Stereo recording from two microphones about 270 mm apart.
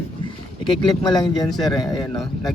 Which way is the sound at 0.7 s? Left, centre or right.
Centre.